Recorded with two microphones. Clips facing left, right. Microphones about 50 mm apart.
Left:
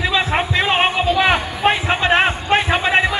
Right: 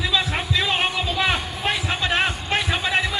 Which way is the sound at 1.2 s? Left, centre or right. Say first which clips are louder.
Left 5 dB; left.